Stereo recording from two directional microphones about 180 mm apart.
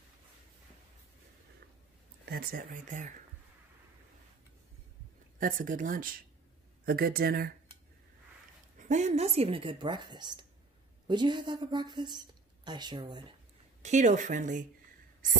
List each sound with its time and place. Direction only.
2.2 s speech: 55° right (ahead or behind)
5.4 s speech: 50° right (ahead or behind)
8.7 s a woman's voice: 40° right (ahead or behind); by 13.2 s 25° right (ahead or behind)
13.8 s speech: 40° right (ahead or behind)